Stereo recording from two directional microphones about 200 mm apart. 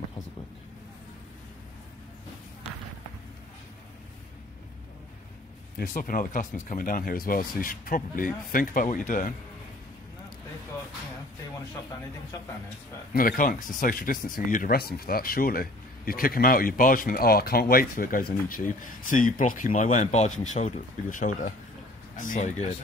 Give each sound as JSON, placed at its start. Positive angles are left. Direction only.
{"t": 5.8, "sound": "speech", "side_deg": 45}
{"t": 13.1, "sound": "speech", "side_deg": 45}